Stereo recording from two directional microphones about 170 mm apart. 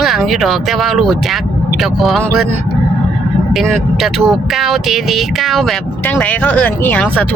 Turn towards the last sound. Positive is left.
turn(degrees=10)  # may be behind; listen again after turning